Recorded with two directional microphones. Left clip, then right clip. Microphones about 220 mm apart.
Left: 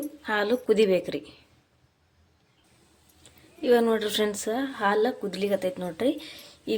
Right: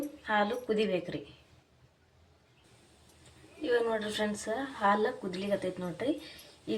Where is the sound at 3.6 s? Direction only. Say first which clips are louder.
Left 8 dB; 45° left (ahead or behind).